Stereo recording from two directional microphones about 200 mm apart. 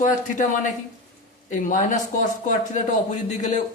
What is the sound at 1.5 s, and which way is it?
Speech, 40° left (ahead or behind).